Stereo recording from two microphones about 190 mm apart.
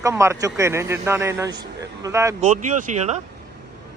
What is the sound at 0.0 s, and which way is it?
Speech, 15° right (ahead or behind).